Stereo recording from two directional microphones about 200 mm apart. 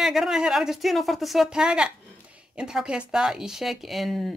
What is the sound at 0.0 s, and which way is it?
Speech, centre (ahead or behind).